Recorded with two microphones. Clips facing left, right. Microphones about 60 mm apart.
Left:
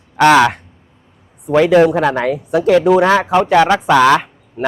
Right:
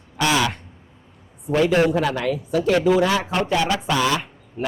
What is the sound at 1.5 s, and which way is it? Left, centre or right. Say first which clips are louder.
Speech: left 8 dB; left.